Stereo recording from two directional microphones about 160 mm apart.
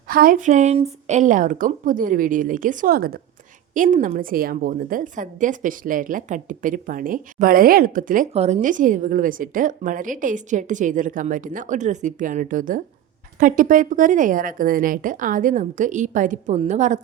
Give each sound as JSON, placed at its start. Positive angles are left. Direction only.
{"t": 0.1, "sound": "a woman's voice", "side_deg": -65}
{"t": 3.9, "sound": "a woman's voice", "side_deg": -55}
{"t": 8.3, "sound": "a woman's voice", "side_deg": -40}